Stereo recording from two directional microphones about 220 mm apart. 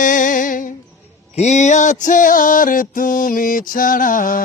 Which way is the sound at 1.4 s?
30° left (ahead or behind).